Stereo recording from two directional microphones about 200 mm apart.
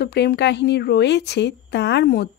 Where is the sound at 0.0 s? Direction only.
55° left (ahead or behind).